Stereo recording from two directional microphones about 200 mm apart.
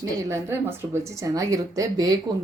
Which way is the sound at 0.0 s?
15° right (ahead or behind).